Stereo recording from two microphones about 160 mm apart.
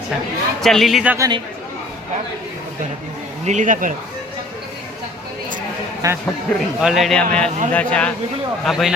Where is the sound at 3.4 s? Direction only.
50° right (ahead or behind).